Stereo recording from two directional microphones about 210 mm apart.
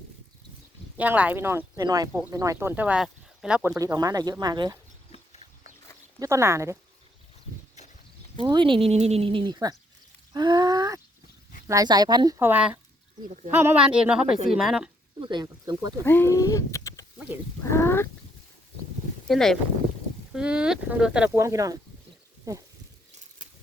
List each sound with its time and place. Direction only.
0.9 s speech: 5° right (ahead or behind)
3.8 s speech: 15° right (ahead or behind)
5.1 s pig: 30° left (ahead or behind)
6.1 s speech: 15° right (ahead or behind)
7.8 s a sound: 35° left (ahead or behind)
8.4 s speech: 20° right (ahead or behind); by 14.8 s centre (ahead or behind)
15.2 s speech: 20° right (ahead or behind)
16.0 s speech: 10° left (ahead or behind)
19.3 s speech: centre (ahead or behind); by 22.6 s 15° right (ahead or behind)